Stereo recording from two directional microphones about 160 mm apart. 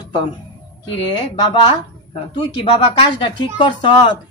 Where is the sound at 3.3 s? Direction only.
30° left (ahead or behind).